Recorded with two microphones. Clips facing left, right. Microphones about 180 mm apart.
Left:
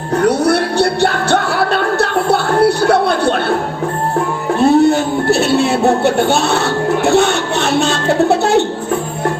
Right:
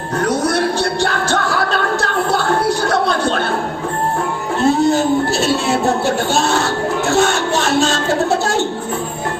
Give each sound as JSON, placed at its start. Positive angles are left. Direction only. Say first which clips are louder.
{"t": 0.3, "sound": "music", "louder": "left 3 dB", "side_deg": 60}
{"t": 4.7, "sound": "music", "louder": "left 2 dB", "side_deg": 60}